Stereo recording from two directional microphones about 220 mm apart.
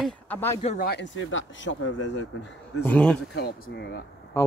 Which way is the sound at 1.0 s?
60° left (ahead or behind).